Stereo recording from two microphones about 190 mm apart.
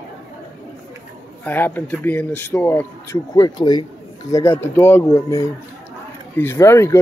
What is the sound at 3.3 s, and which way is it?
Speech, 20° left (ahead or behind).